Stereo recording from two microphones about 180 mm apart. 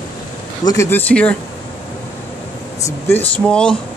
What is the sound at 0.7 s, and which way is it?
Speech, 15° left (ahead or behind).